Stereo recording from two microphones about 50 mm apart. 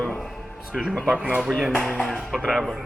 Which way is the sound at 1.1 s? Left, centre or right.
Right.